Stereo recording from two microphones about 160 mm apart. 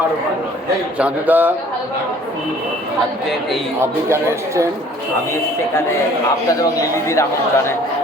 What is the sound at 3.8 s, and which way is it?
Speech, 15° right (ahead or behind).